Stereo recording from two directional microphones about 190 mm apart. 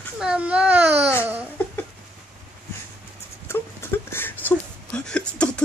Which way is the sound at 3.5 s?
10° left (ahead or behind).